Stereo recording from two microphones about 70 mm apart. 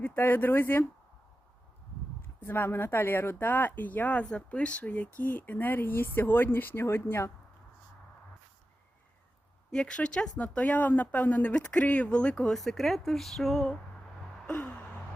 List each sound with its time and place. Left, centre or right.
0.0 s speech: left
2.4 s speech: left
9.7 s speech: centre
12.5 s speech: centre
14.4 s gasp: centre